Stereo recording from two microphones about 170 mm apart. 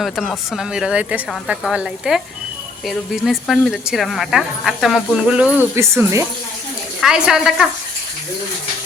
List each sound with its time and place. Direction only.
0.0 s speech: centre (ahead or behind)
7.0 s speech: 5° right (ahead or behind)